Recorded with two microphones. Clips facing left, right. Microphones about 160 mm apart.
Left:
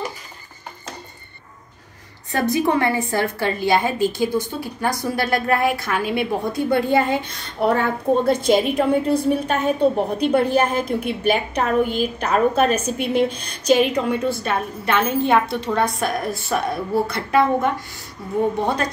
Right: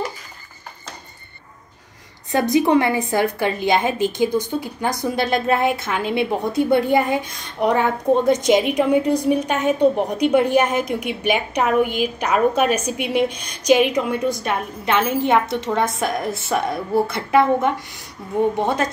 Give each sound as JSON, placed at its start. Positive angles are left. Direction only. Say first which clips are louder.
{"t": 2.3, "sound": "a woman's voice", "louder": "right 3 dB", "side_deg": -20}